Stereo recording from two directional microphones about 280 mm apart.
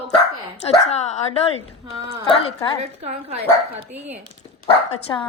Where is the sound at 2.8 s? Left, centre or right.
Right.